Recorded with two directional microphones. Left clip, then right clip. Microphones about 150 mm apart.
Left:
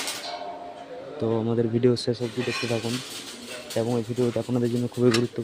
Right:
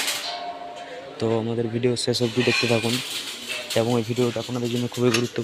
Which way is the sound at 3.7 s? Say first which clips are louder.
Right 4 dB; 10° right (ahead or behind).